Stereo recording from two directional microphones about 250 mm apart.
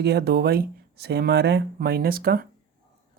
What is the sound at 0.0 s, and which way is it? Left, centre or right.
Speech, right.